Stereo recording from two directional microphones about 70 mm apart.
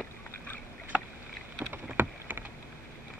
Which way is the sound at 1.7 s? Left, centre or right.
Right.